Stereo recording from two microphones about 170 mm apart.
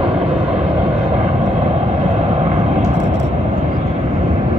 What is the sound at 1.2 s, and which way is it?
Vehicle, 40° right (ahead or behind).